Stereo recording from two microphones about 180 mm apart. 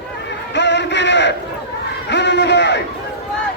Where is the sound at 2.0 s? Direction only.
75° left (ahead or behind).